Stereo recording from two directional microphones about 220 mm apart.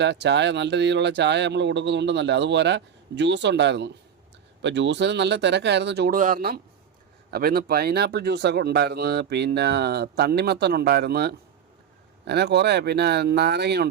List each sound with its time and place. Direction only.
0.0 s speech: 50° right (ahead or behind)